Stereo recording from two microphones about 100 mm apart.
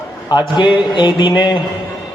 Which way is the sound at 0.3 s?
50° left (ahead or behind).